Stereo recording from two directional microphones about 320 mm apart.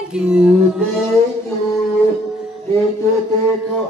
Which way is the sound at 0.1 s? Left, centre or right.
Centre.